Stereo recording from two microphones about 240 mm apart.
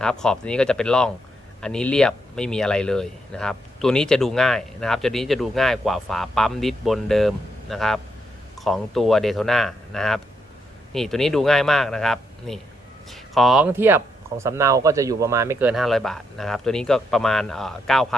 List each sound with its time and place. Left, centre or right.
0.0 s speech: centre
15.7 s speech: centre